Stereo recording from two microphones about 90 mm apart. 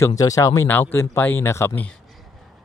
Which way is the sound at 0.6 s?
25° left (ahead or behind).